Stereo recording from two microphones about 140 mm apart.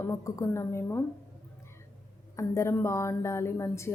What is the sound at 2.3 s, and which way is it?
Speech, 20° left (ahead or behind).